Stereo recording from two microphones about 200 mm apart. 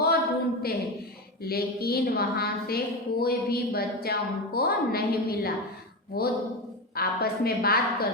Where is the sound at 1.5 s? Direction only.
50° left (ahead or behind).